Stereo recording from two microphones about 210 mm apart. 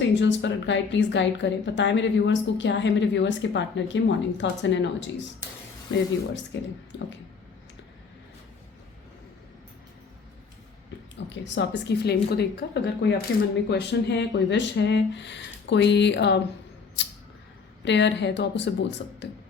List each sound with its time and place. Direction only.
0.0 s a woman's voice: 60° left (ahead or behind)
11.3 s a woman's voice: 60° left (ahead or behind)
17.8 s a woman's voice: 55° left (ahead or behind)